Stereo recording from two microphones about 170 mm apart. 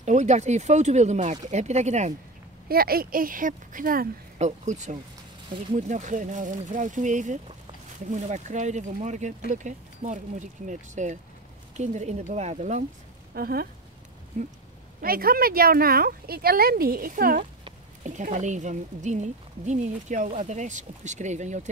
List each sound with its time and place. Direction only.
0.0 s speech: 45° right (ahead or behind)
2.7 s speech: 60° right (ahead or behind)
4.4 s speech: 45° right (ahead or behind)
13.3 s speech: 65° right (ahead or behind)
14.3 s speech: 50° right (ahead or behind)
15.0 s speech: 60° right (ahead or behind); by 21.5 s 45° right (ahead or behind)